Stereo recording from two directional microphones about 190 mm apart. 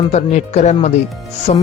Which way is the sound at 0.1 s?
35° left (ahead or behind).